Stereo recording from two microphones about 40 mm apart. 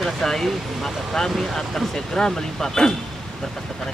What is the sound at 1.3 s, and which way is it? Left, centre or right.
Speech, centre.